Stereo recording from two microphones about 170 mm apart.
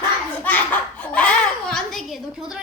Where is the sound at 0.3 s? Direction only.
10° left (ahead or behind).